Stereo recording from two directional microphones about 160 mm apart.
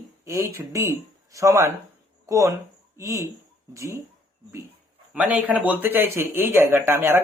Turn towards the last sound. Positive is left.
turn(degrees=-15)  # may be behind; listen again after turning